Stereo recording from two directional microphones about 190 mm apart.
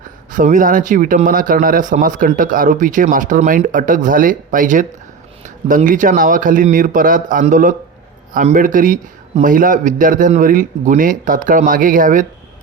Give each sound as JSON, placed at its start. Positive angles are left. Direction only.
{"t": 0.3, "sound": "speech", "side_deg": -45}